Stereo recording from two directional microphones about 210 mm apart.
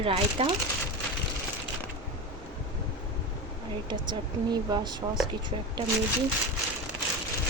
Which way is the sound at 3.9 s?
20° right (ahead or behind).